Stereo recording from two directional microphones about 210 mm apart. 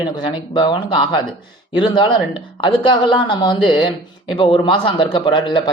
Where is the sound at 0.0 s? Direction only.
20° left (ahead or behind).